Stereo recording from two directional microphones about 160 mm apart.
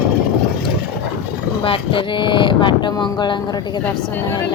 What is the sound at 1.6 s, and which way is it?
Speech, 35° left (ahead or behind).